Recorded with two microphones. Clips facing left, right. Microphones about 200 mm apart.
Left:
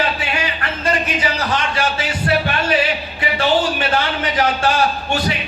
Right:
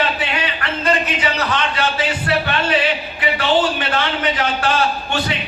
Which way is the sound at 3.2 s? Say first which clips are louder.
Even; 25° left (ahead or behind).